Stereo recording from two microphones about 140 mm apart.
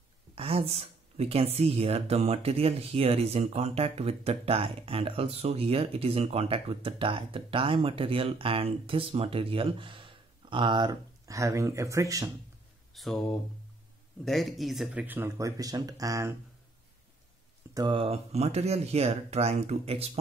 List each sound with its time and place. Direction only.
0.4 s speech: 45° right (ahead or behind); by 12.3 s 25° right (ahead or behind)
12.9 s speech: centre (ahead or behind); by 16.3 s 20° right (ahead or behind)
17.7 s speech: 35° right (ahead or behind)